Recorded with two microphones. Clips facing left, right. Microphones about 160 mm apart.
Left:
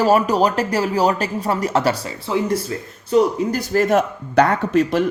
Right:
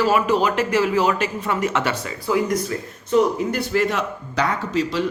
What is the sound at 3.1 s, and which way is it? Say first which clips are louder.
Speech: left 2 dB; 40° left (ahead or behind).